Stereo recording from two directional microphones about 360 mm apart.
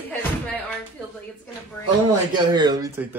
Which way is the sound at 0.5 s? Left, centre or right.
Centre.